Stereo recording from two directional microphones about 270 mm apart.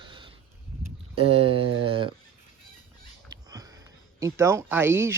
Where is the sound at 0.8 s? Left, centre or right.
Right.